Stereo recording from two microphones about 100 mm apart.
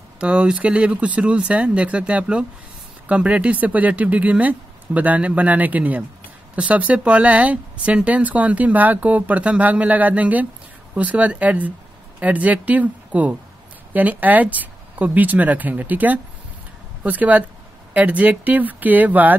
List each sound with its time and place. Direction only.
0.2 s speech: 10° right (ahead or behind)